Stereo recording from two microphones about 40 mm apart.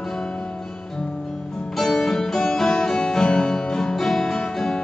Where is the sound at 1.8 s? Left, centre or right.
Centre.